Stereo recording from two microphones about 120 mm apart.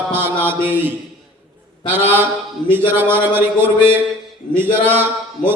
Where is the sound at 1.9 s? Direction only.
15° right (ahead or behind).